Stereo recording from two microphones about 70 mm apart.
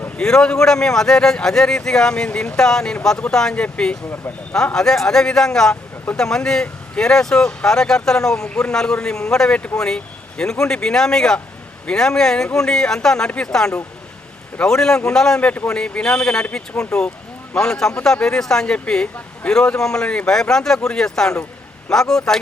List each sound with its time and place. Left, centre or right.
0.2 s speech: centre
8.4 s a man's voice: centre
15.4 s speech: centre